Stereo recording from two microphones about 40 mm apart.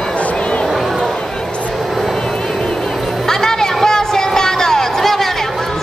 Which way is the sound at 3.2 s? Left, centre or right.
Centre.